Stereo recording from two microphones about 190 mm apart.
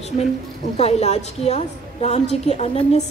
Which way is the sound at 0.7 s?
35° left (ahead or behind).